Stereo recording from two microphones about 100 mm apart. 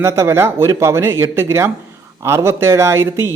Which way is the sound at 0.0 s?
25° right (ahead or behind).